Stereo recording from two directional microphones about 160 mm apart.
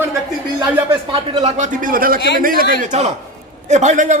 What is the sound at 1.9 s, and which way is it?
Speech, 65° right (ahead or behind).